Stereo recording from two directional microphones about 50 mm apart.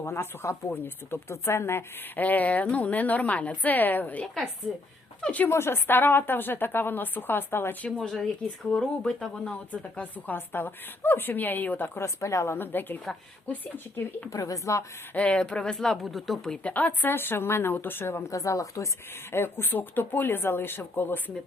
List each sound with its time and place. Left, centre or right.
0.0 s speech: left
2.1 s a woman's voice: left
4.6 s speech: centre
5.5 s a woman's voice: left
7.9 s speech: centre
10.3 s a woman's voice: left
11.9 s speech: left
12.5 s a woman's voice: left
14.3 s a woman's voice: left
15.1 s speech: left; by 16.6 s centre
16.7 s a woman's voice: left
17.2 s a woman's voice: left
18.3 s a woman's voice: left
19.3 s a woman's voice: left